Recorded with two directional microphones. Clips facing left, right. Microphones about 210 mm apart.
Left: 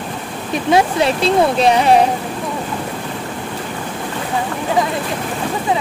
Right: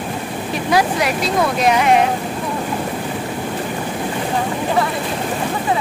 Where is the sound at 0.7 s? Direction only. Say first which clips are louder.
Left 3 dB; 25° left (ahead or behind).